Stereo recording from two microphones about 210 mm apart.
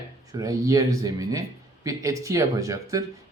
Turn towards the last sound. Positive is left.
turn(degrees=-15)  # may be behind; listen again after turning